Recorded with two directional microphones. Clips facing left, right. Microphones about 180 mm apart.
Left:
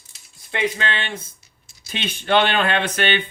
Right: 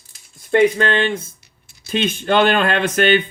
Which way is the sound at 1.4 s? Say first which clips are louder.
Right 2 dB; 65° right (ahead or behind).